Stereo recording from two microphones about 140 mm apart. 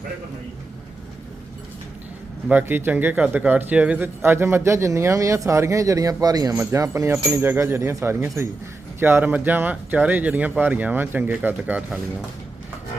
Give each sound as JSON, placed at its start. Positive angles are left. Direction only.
{"t": 2.5, "sound": "speech", "side_deg": -10}